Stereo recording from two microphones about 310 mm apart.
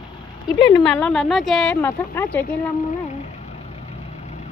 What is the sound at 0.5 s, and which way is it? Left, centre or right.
Speech, centre.